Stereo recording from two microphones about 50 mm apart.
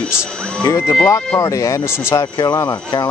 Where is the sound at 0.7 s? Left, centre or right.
Left.